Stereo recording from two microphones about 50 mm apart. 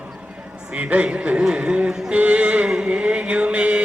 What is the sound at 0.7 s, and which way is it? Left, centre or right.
Speech, right.